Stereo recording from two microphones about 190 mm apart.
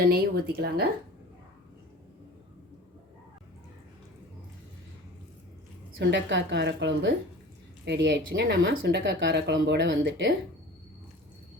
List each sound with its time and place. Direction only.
0.0 s speech: 55° right (ahead or behind)
6.0 s speech: 70° right (ahead or behind)